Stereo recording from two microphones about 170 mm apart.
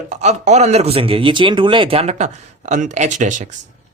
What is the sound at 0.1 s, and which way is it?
Speech, 40° right (ahead or behind).